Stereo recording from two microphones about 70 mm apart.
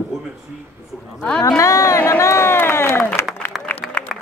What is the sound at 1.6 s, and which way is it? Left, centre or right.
Speech, left.